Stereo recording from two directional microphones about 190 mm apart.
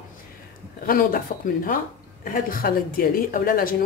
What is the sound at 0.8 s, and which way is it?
A woman's voice, 50° left (ahead or behind).